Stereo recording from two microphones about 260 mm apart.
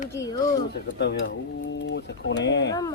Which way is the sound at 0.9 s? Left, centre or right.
Left.